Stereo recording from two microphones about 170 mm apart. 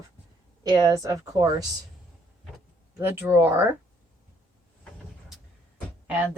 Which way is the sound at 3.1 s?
15° right (ahead or behind).